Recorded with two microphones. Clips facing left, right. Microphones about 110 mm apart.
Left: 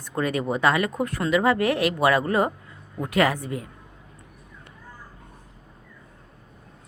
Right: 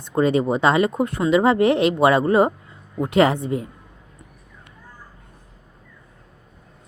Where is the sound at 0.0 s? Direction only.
25° right (ahead or behind).